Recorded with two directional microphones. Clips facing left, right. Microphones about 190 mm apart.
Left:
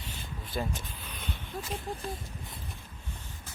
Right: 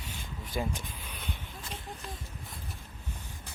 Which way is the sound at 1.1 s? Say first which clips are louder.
Left 2 dB; 10° right (ahead or behind).